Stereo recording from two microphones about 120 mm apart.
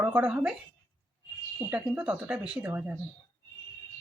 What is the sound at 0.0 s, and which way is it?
Speech, 10° right (ahead or behind).